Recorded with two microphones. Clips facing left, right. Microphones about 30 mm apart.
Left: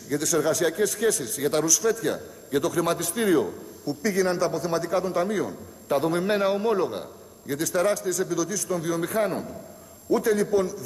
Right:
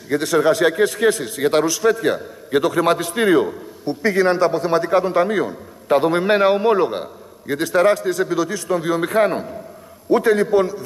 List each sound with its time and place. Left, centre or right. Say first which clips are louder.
0.1 s a man's voice: right 7 dB; right